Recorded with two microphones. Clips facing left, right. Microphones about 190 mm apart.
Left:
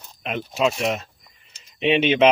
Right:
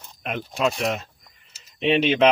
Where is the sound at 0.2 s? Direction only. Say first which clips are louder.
Left 2 dB; centre (ahead or behind).